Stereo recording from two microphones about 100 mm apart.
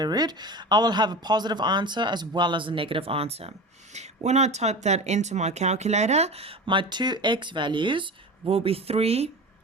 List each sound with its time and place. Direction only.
0.0 s speech: 45° right (ahead or behind); by 9.3 s 90° right